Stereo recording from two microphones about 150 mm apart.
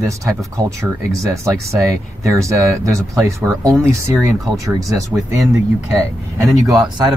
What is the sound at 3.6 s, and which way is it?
Speech, 20° right (ahead or behind).